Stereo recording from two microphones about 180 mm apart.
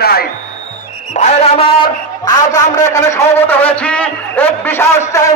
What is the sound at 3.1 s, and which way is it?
A man's voice, 10° left (ahead or behind).